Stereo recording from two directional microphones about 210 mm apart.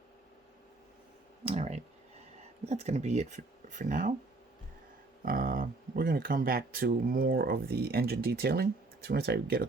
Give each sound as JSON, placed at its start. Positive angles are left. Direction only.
{"t": 1.5, "sound": "speech", "side_deg": -30}
{"t": 5.2, "sound": "speech", "side_deg": -45}